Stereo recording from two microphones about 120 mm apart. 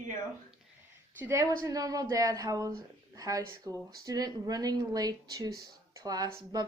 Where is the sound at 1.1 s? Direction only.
20° right (ahead or behind).